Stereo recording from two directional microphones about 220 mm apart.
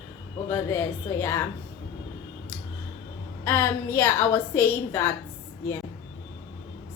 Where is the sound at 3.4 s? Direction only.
10° left (ahead or behind).